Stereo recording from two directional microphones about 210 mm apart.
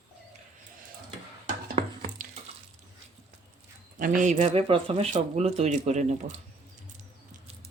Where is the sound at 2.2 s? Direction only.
40° right (ahead or behind).